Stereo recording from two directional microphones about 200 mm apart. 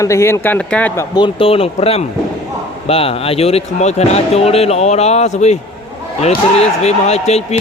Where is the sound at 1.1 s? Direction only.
25° left (ahead or behind).